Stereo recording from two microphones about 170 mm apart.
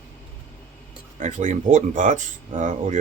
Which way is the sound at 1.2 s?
45° right (ahead or behind).